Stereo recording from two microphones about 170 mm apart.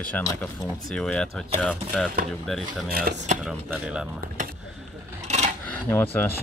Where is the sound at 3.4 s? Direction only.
5° right (ahead or behind).